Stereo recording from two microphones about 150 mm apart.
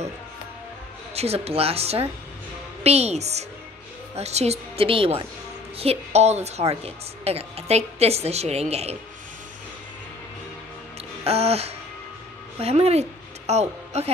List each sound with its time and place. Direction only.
1.1 s a woman's voice: 45° right (ahead or behind)
11.2 s a woman's voice: 45° right (ahead or behind)